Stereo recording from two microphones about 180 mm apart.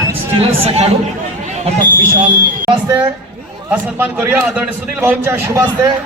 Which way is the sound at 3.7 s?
10° right (ahead or behind).